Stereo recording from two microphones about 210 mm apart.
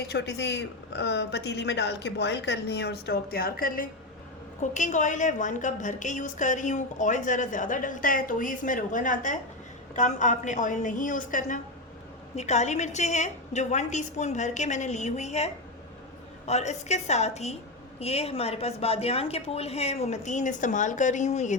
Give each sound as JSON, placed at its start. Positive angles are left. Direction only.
{"t": 0.1, "sound": "a woman's voice", "side_deg": 55}